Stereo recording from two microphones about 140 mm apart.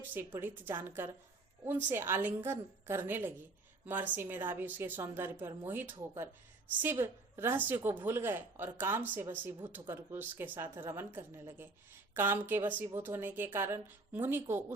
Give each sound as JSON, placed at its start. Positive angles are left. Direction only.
{"t": 0.3, "sound": "speech", "side_deg": -15}